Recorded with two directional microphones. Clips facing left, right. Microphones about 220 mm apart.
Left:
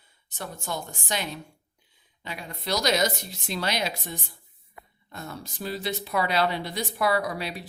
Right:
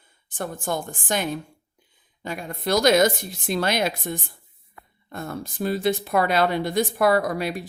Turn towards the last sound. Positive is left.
turn(degrees=-50)  # may be behind; listen again after turning